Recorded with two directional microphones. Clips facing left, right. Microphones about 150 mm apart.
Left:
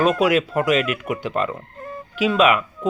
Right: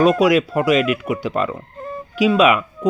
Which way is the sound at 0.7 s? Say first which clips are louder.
Right 4 dB; 35° right (ahead or behind).